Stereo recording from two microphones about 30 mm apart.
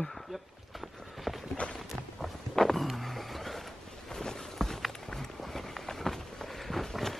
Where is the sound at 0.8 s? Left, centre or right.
Centre.